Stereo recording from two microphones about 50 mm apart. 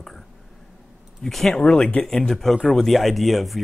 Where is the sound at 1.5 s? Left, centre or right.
Centre.